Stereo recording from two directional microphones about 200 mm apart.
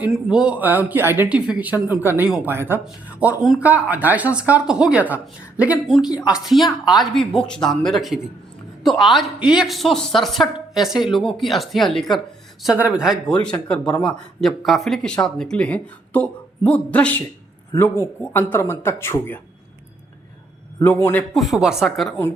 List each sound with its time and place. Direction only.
0.0 s speech: 5° right (ahead or behind); by 19.4 s 10° left (ahead or behind)
20.7 s speech: 10° left (ahead or behind)
21.5 s speech: centre (ahead or behind)